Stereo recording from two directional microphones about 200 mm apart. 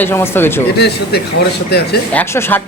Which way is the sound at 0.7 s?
55° left (ahead or behind).